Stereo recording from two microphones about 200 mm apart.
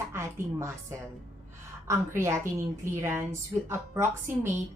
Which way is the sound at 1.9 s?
15° right (ahead or behind).